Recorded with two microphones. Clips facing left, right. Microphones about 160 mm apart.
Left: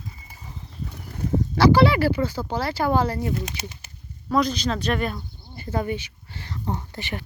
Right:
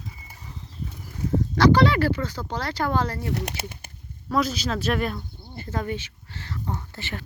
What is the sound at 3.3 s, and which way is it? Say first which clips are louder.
Speech: even; 60° right (ahead or behind).